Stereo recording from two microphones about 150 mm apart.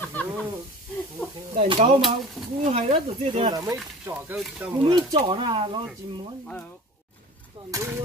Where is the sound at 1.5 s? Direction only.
45° right (ahead or behind); by 3.8 s 25° right (ahead or behind).